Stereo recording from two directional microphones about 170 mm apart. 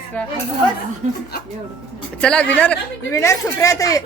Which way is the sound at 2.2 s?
5° left (ahead or behind).